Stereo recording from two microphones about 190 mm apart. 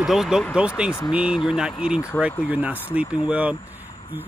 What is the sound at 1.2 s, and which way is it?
Speech, 25° left (ahead or behind).